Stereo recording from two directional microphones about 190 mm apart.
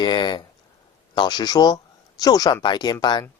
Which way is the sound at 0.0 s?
25° left (ahead or behind).